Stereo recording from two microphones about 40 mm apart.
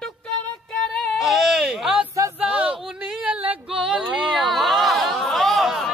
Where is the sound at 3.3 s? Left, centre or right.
Right.